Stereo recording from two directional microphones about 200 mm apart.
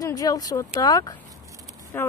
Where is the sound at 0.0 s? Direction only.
15° left (ahead or behind).